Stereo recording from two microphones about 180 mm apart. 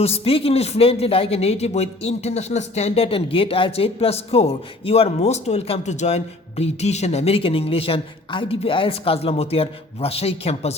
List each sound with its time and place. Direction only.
0.0 s speech: 35° left (ahead or behind)